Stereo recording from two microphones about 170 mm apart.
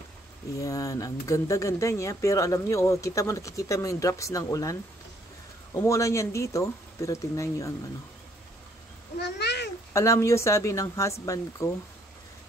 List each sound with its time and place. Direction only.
0.6 s speech: 20° left (ahead or behind)
5.8 s speech: 20° left (ahead or behind)
9.4 s cat: 85° left
9.9 s speech: 15° left (ahead or behind)